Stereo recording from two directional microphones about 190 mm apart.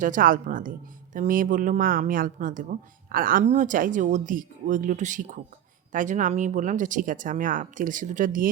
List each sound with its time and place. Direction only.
0.0 s speech: 45° right (ahead or behind)